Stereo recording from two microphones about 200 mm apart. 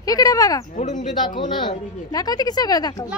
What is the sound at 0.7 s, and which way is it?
Speech, 35° left (ahead or behind).